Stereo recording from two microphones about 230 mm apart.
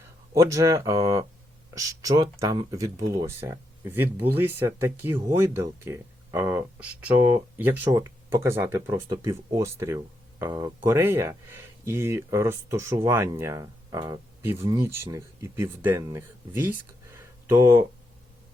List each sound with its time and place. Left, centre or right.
0.3 s speech: centre